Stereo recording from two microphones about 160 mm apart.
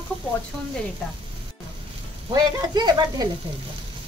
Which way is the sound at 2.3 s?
25° right (ahead or behind).